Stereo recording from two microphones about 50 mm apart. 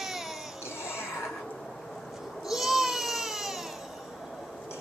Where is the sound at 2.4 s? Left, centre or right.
Centre.